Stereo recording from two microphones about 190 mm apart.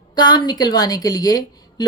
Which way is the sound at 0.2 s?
20° left (ahead or behind).